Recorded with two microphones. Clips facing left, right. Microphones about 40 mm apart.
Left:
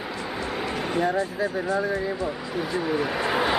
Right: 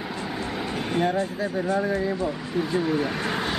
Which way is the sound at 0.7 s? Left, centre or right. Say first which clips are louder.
Left 1 dB; left.